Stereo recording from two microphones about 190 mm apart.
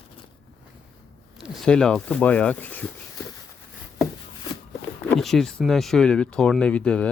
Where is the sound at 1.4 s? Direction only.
Centre (ahead or behind).